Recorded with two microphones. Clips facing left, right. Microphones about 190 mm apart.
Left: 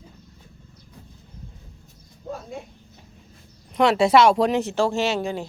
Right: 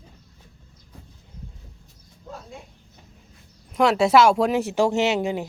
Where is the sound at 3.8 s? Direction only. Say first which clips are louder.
Even; centre (ahead or behind); by 5.5 s 20° right (ahead or behind).